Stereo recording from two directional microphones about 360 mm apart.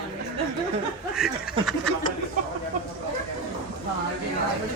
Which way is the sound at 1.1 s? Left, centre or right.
Centre.